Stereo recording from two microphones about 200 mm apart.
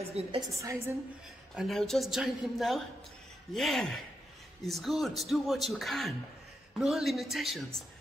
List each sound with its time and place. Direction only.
0.2 s a woman's voice: 30° right (ahead or behind)
0.6 s a woman's voice: 15° right (ahead or behind)
1.5 s speech: centre (ahead or behind)